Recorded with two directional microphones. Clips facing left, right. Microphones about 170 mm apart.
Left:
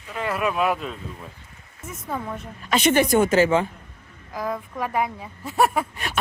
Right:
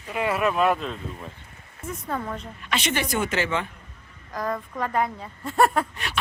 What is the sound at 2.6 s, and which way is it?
A woman's voice, 45° left (ahead or behind).